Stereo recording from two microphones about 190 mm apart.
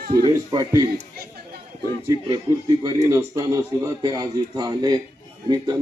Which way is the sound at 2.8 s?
15° right (ahead or behind).